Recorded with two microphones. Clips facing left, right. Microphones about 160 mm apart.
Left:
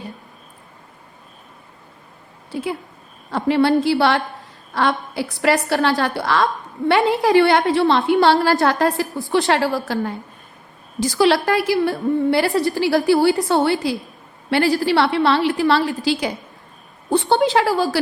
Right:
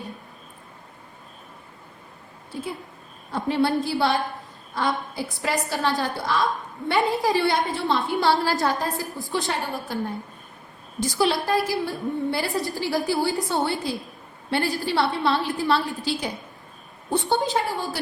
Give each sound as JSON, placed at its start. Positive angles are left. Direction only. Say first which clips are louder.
{"t": 2.5, "sound": "a woman's voice", "louder": "left 7 dB", "side_deg": 90}